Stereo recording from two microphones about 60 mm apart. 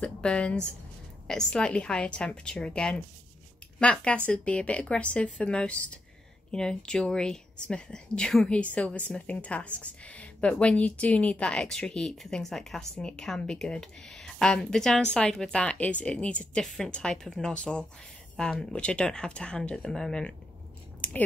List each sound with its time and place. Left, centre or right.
0.0 s a woman's voice: centre